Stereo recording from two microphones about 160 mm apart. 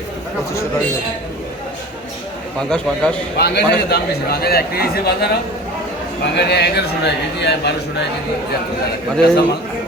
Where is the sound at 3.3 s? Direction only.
90° left.